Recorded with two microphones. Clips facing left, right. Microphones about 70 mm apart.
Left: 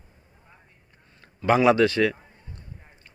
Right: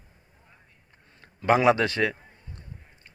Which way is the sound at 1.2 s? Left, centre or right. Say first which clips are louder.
Left 1 dB; right.